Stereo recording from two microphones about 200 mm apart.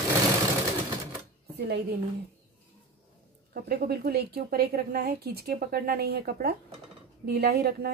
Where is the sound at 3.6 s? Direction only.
50° right (ahead or behind).